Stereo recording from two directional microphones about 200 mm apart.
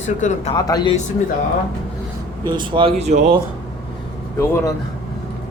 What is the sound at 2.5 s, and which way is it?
Speech, 25° right (ahead or behind).